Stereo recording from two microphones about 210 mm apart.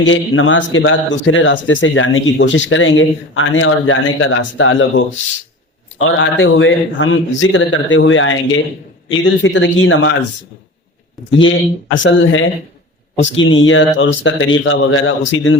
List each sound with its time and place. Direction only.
0.0 s a man's voice: 65° left (ahead or behind)
11.3 s a man's voice: 65° left (ahead or behind)